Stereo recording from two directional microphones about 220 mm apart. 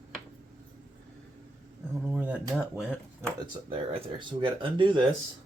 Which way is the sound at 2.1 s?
5° right (ahead or behind).